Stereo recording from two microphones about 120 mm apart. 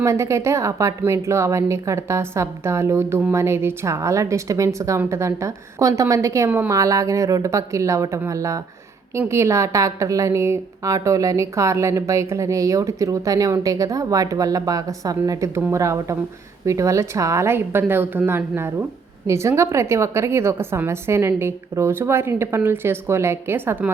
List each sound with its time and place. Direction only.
0.0 s a woman's voice: 25° right (ahead or behind)